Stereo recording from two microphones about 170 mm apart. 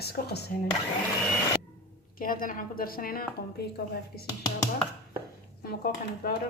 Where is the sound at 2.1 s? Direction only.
55° left (ahead or behind).